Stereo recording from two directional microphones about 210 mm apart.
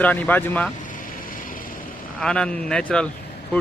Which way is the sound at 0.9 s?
40° left (ahead or behind).